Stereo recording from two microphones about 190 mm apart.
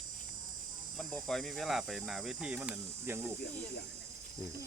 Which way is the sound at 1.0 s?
Centre (ahead or behind).